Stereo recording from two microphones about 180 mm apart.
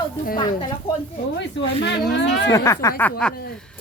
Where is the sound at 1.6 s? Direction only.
85° left.